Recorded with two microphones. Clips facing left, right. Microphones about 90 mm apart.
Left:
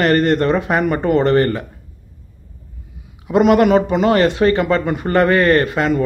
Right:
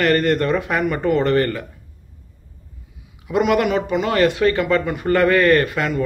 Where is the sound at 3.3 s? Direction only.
35° left (ahead or behind).